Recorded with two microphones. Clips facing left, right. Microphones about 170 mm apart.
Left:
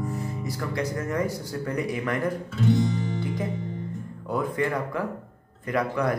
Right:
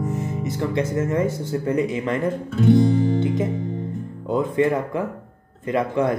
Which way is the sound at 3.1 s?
25° right (ahead or behind).